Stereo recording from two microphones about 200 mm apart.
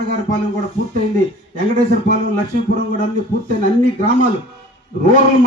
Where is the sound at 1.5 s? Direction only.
40° right (ahead or behind).